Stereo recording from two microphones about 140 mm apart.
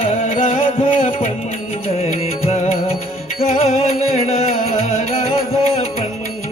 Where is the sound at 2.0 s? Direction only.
50° left (ahead or behind).